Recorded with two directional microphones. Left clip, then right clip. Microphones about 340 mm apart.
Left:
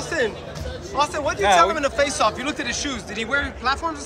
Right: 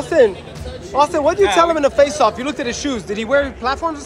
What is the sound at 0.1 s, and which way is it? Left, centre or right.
A man's voice, centre.